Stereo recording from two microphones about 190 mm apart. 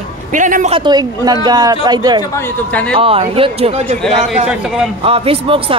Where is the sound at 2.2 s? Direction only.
10° left (ahead or behind).